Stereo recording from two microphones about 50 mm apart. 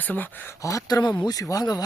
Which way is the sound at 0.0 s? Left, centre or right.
Left.